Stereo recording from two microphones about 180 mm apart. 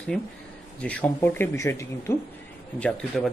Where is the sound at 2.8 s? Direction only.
5° left (ahead or behind).